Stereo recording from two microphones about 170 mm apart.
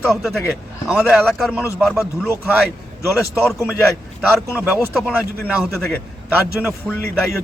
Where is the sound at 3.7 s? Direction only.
Centre (ahead or behind).